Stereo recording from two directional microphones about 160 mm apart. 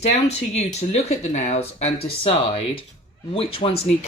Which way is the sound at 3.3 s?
35° left (ahead or behind).